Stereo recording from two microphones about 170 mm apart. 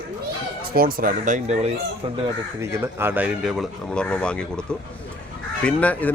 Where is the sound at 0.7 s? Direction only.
60° right (ahead or behind).